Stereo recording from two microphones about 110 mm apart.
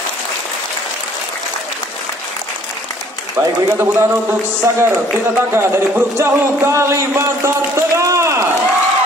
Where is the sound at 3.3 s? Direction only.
25° right (ahead or behind).